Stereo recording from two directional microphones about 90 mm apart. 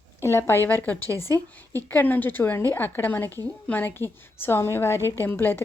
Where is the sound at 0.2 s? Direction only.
30° left (ahead or behind).